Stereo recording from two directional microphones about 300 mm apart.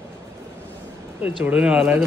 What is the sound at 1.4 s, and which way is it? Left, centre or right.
Speech, centre.